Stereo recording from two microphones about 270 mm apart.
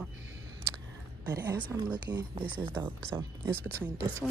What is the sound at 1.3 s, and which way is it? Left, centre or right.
Speech, centre.